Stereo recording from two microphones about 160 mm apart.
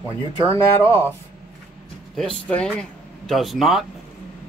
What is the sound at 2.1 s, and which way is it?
Speech, 5° left (ahead or behind).